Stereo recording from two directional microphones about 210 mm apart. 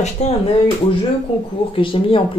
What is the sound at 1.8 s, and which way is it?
Speech, 25° left (ahead or behind).